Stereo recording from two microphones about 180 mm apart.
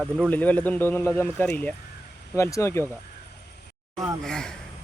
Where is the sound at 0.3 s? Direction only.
10° left (ahead or behind).